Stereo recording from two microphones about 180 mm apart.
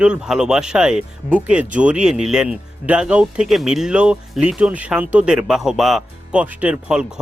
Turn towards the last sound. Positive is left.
turn(degrees=-5)  # may be behind; listen again after turning